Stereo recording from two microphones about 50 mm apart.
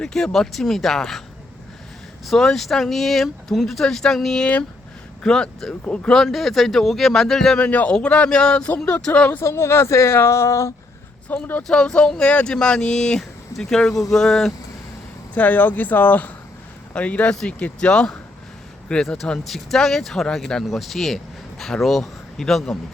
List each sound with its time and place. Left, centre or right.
0.0 s speech: centre
2.2 s speech: centre
5.8 s speech: left
6.1 s speech: centre
7.6 s speech: left
9.4 s speech: left
10.2 s a sound: left
11.3 s speech: left
11.7 s speech: centre
15.4 s speech: left; by 18.2 s centre
19.0 s speech: centre
20.7 s speech: centre